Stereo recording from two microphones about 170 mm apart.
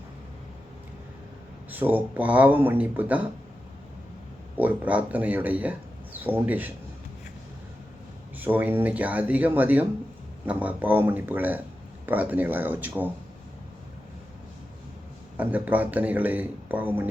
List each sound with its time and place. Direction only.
1.7 s speech: 10° right (ahead or behind)
4.5 s speech: 10° right (ahead or behind)
8.4 s speech: 10° right (ahead or behind)
15.4 s speech: 10° right (ahead or behind)